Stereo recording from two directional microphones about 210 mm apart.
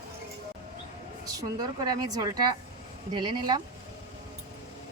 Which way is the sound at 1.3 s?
15° right (ahead or behind).